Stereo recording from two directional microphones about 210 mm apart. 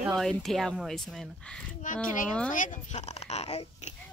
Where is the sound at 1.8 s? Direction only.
40° left (ahead or behind).